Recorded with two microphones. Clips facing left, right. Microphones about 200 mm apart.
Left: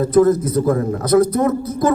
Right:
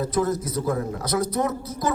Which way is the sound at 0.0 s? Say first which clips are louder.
Left 10 dB; 55° left (ahead or behind).